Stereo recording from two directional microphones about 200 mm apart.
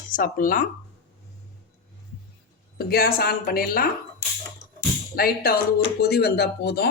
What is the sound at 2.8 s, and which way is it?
Speech, 50° left (ahead or behind).